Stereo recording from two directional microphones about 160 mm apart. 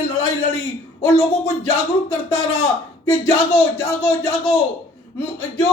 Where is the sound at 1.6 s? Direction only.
15° left (ahead or behind).